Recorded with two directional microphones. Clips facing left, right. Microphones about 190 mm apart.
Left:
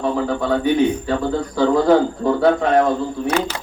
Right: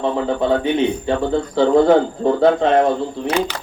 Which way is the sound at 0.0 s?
25° right (ahead or behind).